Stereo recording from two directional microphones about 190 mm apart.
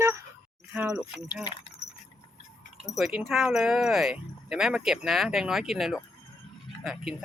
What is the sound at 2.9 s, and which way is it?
Speech, 5° right (ahead or behind).